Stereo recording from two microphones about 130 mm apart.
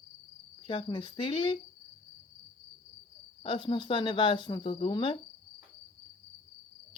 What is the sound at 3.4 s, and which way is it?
Speech, 40° left (ahead or behind).